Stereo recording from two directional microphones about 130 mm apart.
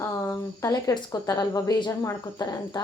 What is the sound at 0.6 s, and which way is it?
Speech, 25° left (ahead or behind).